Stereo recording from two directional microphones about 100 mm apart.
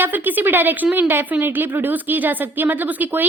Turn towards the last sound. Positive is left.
turn(degrees=-20)  # may be behind; listen again after turning